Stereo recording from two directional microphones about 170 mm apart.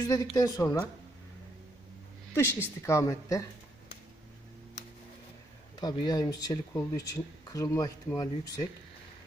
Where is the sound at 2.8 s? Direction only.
15° left (ahead or behind).